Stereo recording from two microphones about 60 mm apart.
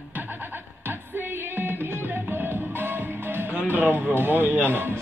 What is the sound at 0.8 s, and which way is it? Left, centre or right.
Music, right.